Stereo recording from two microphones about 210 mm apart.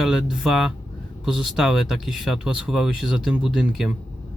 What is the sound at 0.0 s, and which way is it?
Speech, centre (ahead or behind).